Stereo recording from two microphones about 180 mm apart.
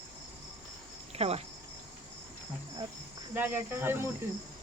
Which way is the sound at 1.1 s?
35° right (ahead or behind).